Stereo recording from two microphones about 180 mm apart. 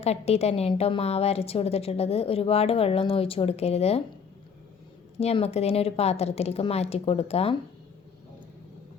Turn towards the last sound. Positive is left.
turn(degrees=35)  # may be behind; listen again after turning